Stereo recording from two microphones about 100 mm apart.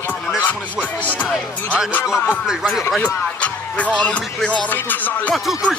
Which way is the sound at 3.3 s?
15° left (ahead or behind).